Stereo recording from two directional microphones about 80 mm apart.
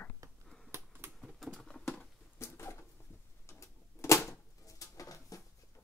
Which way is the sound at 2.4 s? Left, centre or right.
Left.